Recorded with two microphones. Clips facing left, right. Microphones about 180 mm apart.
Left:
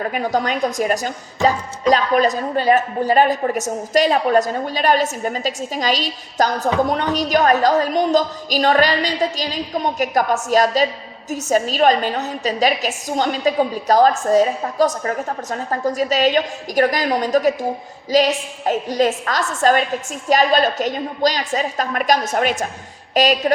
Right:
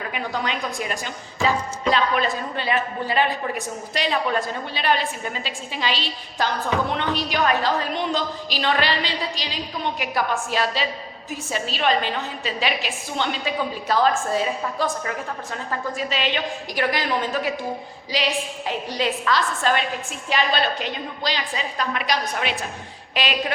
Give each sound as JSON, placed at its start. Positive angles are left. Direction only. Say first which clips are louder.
{"t": 0.0, "sound": "a woman's voice", "louder": "left 7 dB", "side_deg": 45}